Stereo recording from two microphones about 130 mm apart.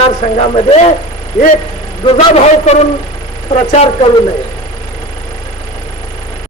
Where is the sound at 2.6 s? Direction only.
55° left (ahead or behind).